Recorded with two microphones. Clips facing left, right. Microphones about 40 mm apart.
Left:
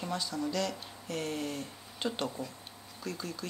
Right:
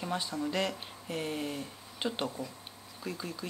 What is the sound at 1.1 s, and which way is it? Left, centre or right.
Speech, centre.